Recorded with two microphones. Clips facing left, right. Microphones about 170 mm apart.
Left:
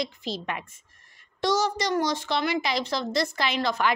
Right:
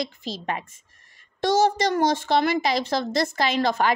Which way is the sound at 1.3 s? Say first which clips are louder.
Right 5 dB; 55° right (ahead or behind).